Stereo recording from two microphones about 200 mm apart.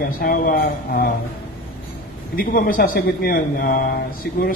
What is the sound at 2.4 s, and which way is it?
A man's voice, 45° left (ahead or behind).